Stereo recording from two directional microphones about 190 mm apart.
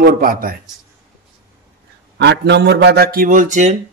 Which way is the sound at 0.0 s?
50° right (ahead or behind).